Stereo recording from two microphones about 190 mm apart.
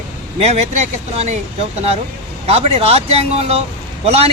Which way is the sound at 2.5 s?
35° right (ahead or behind).